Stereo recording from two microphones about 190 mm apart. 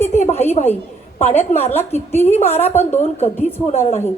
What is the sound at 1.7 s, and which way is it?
Speech, 10° left (ahead or behind).